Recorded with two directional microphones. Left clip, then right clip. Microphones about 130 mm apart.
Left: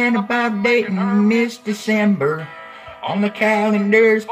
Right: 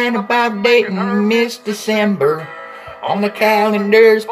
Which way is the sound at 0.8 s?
25° right (ahead or behind).